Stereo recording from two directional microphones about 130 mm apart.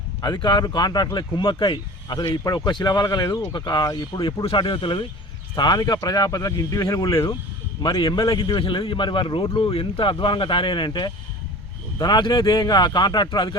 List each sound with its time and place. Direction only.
0.2 s speech: 35° left (ahead or behind)
8.4 s speech: 40° left (ahead or behind)